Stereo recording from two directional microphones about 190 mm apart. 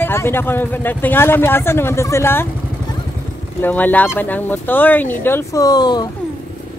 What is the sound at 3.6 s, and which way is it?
Speech, 10° left (ahead or behind).